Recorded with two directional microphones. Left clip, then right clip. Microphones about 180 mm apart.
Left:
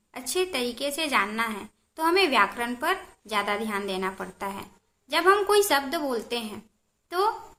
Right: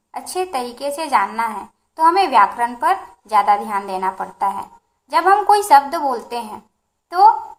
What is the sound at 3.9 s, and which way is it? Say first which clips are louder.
A woman's voice: right 9 dB; 30° left (ahead or behind).